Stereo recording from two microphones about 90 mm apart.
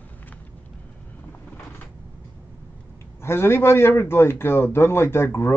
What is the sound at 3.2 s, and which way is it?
A man's voice, 25° left (ahead or behind).